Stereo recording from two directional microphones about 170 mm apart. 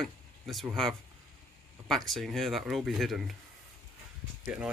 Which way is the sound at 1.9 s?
Centre (ahead or behind).